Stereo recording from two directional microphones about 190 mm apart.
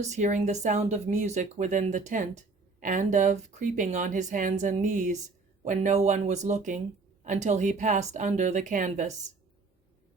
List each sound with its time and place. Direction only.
0.0 s speech: 40° right (ahead or behind)